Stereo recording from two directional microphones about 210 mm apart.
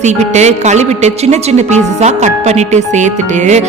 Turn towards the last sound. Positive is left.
turn(degrees=-35)  # may be behind; listen again after turning